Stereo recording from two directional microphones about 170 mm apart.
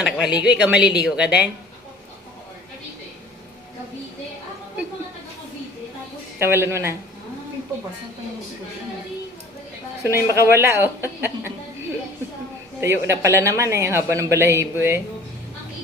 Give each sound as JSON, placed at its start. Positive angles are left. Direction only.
{"t": 0.0, "sound": "a woman's voice", "side_deg": -5}
{"t": 6.4, "sound": "speech", "side_deg": -15}
{"t": 10.0, "sound": "speech", "side_deg": -15}
{"t": 12.8, "sound": "speech", "side_deg": -15}